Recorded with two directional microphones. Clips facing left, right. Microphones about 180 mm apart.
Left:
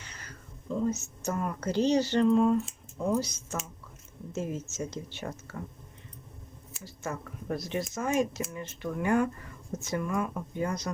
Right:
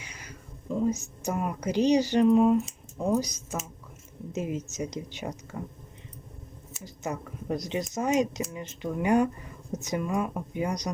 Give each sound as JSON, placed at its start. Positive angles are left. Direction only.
{"t": 0.0, "sound": "speech", "side_deg": -10}
{"t": 6.8, "sound": "speech", "side_deg": -20}